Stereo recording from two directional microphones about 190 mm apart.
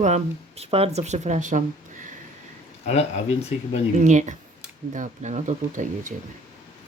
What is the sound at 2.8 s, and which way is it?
Speech, 35° left (ahead or behind).